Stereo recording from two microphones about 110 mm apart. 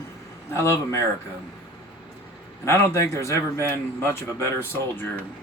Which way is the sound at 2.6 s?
25° left (ahead or behind).